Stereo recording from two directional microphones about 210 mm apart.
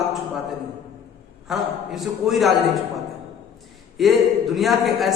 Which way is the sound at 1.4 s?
Centre (ahead or behind).